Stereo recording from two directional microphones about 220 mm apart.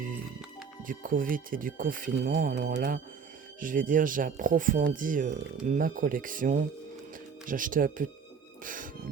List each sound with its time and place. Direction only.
0.9 s speech: 40° right (ahead or behind)